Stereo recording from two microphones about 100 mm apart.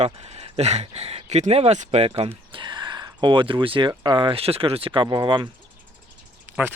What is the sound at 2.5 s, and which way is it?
Speech, 50° right (ahead or behind).